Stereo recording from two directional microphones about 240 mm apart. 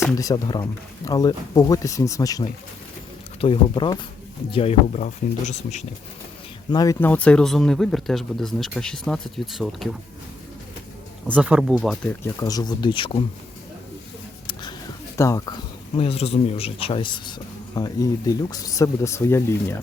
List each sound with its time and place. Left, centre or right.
0.2 s speech: centre
6.7 s speech: centre
11.3 s speech: centre; by 13.2 s left
14.4 s a sound: centre
15.2 s speech: centre